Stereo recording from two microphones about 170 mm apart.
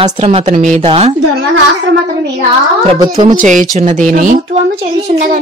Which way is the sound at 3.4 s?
50° right (ahead or behind).